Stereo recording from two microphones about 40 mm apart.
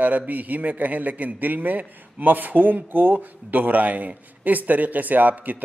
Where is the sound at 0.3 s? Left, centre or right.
Right.